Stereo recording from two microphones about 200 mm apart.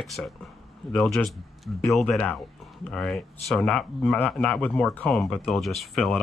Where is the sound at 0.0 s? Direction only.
Centre (ahead or behind).